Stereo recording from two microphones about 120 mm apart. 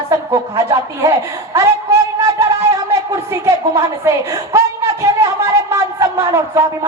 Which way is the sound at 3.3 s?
25° right (ahead or behind).